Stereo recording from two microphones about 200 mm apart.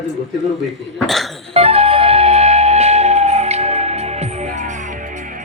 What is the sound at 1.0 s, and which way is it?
Cough, centre (ahead or behind).